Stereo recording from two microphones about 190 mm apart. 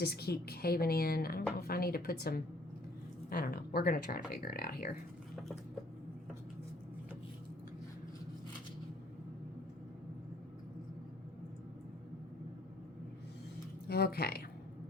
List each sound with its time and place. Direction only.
0.0 s a woman's voice: 55° left (ahead or behind)
13.8 s speech: 55° left (ahead or behind)